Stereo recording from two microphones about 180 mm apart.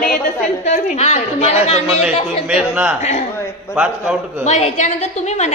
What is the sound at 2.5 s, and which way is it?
Speech, 5° right (ahead or behind).